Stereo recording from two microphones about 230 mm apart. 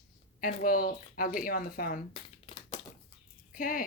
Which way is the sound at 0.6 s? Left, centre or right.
Left.